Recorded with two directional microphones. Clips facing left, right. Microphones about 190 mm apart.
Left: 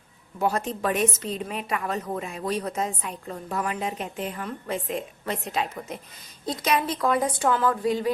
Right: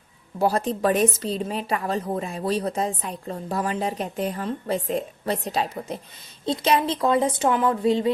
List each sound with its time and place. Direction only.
0.3 s a woman's voice: 35° right (ahead or behind)